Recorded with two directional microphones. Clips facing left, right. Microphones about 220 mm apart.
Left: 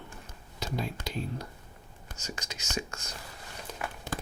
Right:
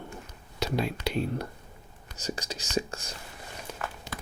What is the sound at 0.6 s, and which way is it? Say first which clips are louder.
Speech: right 6 dB; 75° right (ahead or behind).